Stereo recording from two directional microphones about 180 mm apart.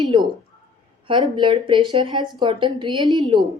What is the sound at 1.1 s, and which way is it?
Speech, 25° right (ahead or behind).